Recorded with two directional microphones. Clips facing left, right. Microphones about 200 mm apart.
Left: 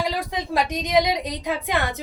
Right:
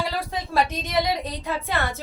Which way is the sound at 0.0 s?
15° left (ahead or behind).